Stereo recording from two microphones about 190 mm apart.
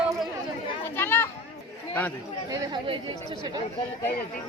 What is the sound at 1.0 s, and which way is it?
Speech, 10° left (ahead or behind).